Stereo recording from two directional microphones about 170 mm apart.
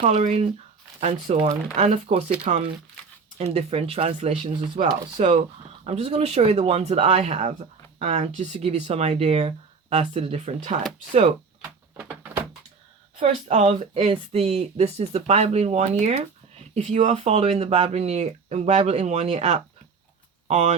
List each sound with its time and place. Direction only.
0.0 s speech: 45° right (ahead or behind)
12.0 s door: 10° right (ahead or behind)
13.1 s speech: 40° right (ahead or behind)